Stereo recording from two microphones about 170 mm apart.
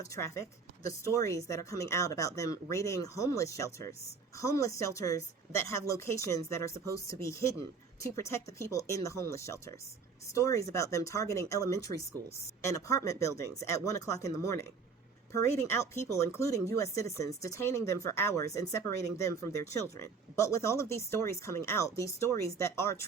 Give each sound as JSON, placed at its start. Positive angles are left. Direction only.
{"t": 0.0, "sound": "a woman's voice", "side_deg": 20}